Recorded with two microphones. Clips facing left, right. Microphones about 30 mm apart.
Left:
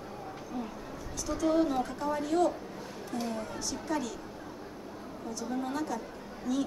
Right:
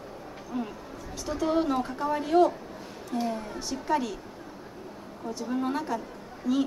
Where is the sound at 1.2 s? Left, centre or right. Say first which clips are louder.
Right 1 dB; right.